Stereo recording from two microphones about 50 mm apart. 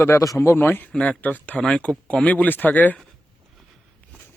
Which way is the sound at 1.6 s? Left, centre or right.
Centre.